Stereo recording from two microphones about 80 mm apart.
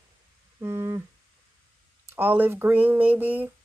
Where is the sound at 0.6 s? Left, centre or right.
Right.